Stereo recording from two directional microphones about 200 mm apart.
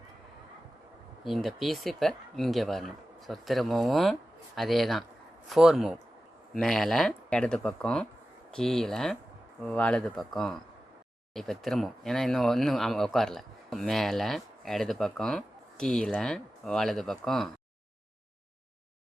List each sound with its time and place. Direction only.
1.2 s speech: centre (ahead or behind)